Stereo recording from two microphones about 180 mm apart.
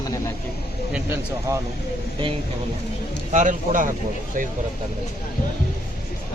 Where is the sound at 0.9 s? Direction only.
5° right (ahead or behind).